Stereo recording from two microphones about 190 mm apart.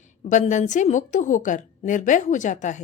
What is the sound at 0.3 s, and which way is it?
A woman's voice, 40° left (ahead or behind).